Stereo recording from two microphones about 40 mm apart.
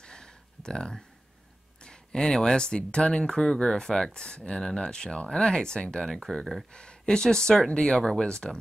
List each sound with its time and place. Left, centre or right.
0.0 s a sound: centre
1.8 s speech: centre
6.0 s speech: centre
6.7 s speech: left